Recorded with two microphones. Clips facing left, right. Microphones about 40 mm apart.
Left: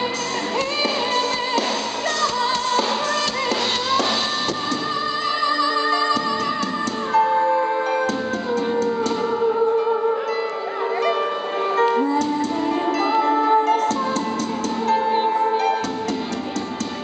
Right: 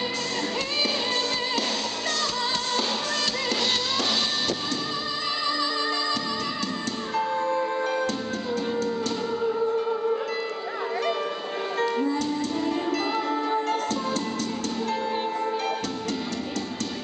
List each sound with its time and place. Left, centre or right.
5.4 s music: centre
7.2 s music: centre
9.4 s music: left
11.9 s music: centre
13.2 s music: centre
13.7 s music: centre
15.0 s music: left